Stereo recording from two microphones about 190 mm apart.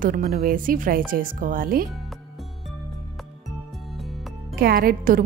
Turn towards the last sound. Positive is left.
turn(degrees=-50)  # may be behind; listen again after turning